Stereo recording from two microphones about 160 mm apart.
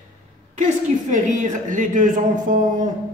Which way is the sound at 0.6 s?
50° right (ahead or behind).